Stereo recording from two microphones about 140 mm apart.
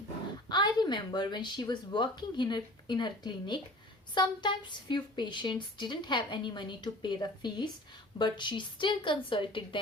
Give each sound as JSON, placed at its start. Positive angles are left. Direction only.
{"t": 0.4, "sound": "speech", "side_deg": 30}